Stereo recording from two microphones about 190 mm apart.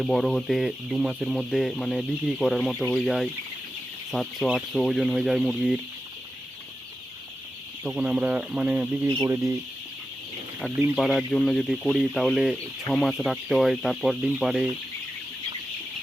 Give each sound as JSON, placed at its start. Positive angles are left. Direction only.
{"t": 0.0, "sound": "speech", "side_deg": 0}
{"t": 7.9, "sound": "speech", "side_deg": -5}
{"t": 10.9, "sound": "speech", "side_deg": 0}